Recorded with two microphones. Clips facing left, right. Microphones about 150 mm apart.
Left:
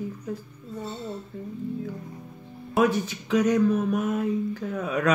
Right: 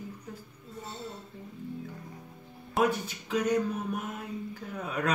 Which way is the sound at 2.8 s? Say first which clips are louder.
Left 5 dB; 90° left.